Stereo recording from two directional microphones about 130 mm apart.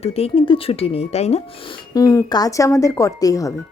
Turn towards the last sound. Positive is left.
turn(degrees=25)  # may be behind; listen again after turning